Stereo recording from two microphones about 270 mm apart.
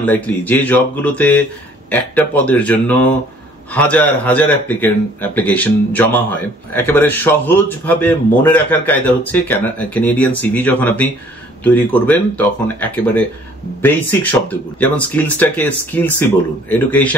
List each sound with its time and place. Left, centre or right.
0.0 s a man's voice: centre